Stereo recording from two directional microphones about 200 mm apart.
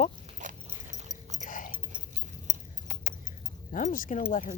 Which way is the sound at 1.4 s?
40° left (ahead or behind).